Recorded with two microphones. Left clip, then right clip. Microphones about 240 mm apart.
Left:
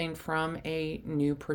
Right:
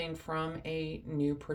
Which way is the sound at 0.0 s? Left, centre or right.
Left.